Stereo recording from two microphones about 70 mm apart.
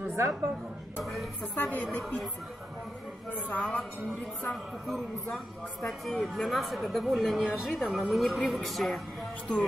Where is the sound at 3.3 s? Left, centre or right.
Left.